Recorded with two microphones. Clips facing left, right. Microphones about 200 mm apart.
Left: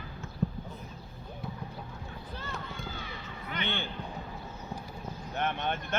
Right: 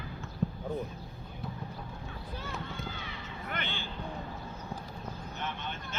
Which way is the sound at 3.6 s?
60° left (ahead or behind).